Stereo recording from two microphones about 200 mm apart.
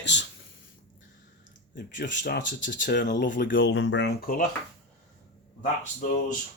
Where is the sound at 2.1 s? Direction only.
60° left (ahead or behind).